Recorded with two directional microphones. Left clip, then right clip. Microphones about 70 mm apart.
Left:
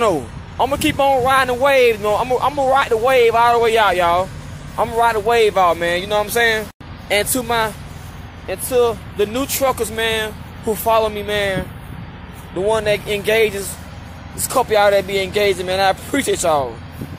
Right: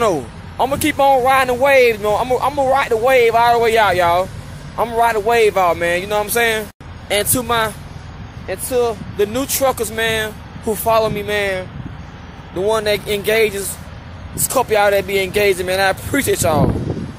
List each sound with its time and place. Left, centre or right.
0.0 s speech: right
4.7 s speech: right
8.5 s speech: right
9.3 s speech: right
10.7 s speech: right
11.0 s speech: right
12.5 s speech: right